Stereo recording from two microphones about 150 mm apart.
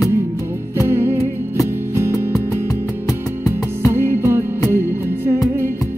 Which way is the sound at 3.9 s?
15° right (ahead or behind).